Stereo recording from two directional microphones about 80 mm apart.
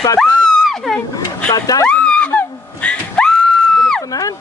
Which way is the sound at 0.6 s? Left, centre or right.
Centre.